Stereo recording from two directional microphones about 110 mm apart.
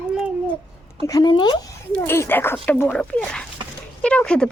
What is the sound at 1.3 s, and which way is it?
Speech, 45° left (ahead or behind).